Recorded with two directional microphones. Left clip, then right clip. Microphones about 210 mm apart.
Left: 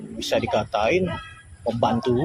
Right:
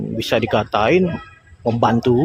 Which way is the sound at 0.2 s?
40° right (ahead or behind).